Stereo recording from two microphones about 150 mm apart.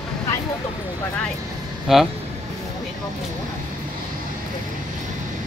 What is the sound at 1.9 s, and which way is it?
Speech, centre (ahead or behind).